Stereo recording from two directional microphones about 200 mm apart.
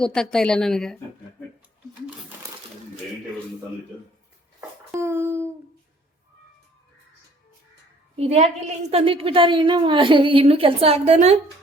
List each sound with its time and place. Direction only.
0.0 s speech: 5° left (ahead or behind)
4.9 s a sound: 15° right (ahead or behind)
8.1 s a woman's voice: 30° right (ahead or behind)